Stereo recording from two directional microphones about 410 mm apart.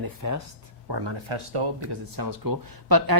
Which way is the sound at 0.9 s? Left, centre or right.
Right.